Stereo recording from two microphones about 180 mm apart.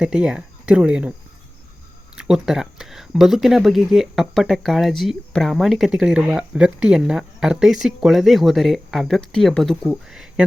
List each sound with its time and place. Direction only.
0.0 s speech: 5° right (ahead or behind)
2.1 s speech: 5° right (ahead or behind)